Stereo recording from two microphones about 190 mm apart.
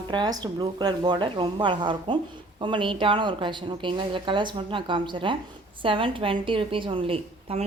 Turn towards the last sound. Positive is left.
turn(degrees=-30)  # may be behind; listen again after turning